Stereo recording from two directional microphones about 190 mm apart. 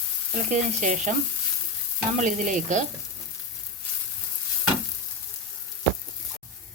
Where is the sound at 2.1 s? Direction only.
40° right (ahead or behind).